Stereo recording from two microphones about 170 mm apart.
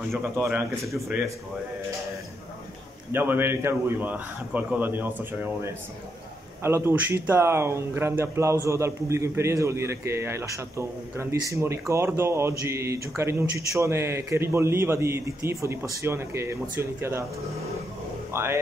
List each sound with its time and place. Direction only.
0.4 s speech: 10° right (ahead or behind)
3.1 s speech: 10° right (ahead or behind)
18.3 s speech: 15° right (ahead or behind)